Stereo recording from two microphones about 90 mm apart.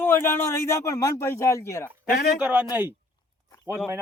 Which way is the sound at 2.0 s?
10° right (ahead or behind).